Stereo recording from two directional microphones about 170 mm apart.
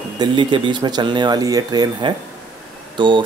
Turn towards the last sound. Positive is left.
turn(degrees=-30)  # may be behind; listen again after turning